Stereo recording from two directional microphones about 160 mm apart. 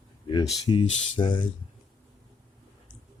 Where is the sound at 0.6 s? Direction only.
30° left (ahead or behind).